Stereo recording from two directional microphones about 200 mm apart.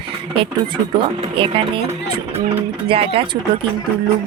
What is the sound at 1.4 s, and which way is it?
Speech, 25° right (ahead or behind).